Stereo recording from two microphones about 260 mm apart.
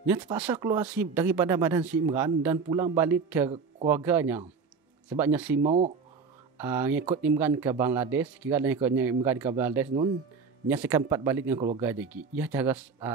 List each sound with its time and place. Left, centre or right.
0.0 s speech: centre
5.6 s speech: right
6.6 s speech: centre